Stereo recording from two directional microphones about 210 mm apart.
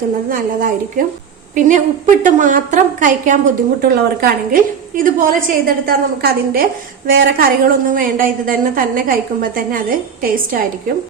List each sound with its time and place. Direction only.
0.3 s a woman's voice: 40° right (ahead or behind)